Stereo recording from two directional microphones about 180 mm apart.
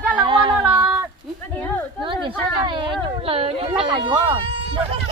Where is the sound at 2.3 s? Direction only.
25° right (ahead or behind).